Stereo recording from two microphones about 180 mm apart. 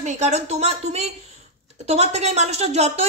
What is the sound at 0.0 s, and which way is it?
Speech, 40° right (ahead or behind).